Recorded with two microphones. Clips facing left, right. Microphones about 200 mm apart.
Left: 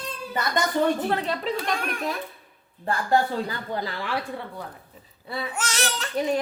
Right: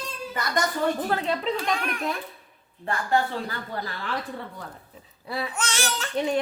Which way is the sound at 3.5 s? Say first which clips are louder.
Left 3 dB; 15° left (ahead or behind).